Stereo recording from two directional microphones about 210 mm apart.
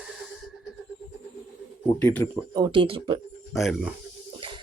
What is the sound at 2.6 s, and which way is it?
Speech, 25° right (ahead or behind).